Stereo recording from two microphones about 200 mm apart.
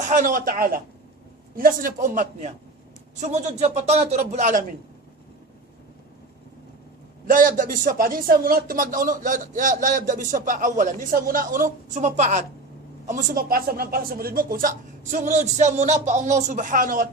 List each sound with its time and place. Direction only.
0.0 s speech: 40° right (ahead or behind)
7.3 s speech: 45° right (ahead or behind)